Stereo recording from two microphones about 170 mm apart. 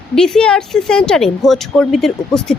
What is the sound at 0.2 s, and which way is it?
Speech, 5° left (ahead or behind).